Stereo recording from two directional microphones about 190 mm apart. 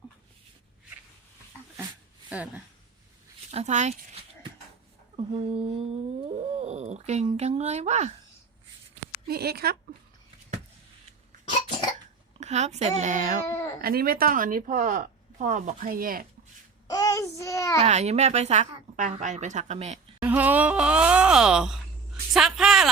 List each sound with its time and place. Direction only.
3.5 s speech: 35° right (ahead or behind)
9.2 s a woman's voice: 55° right (ahead or behind)
12.4 s speech: 35° right (ahead or behind)
13.5 s a sound: 15° left (ahead or behind)
13.8 s speech: 50° right (ahead or behind)
16.9 s child singing: 15° left (ahead or behind)
17.7 s speech: 35° right (ahead or behind)
20.2 s speech: 10° right (ahead or behind)